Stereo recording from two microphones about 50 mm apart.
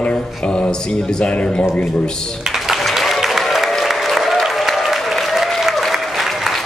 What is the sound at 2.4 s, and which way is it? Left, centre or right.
Applause, centre.